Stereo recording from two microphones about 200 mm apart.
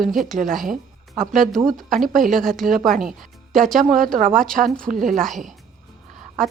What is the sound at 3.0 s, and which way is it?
Music, centre (ahead or behind).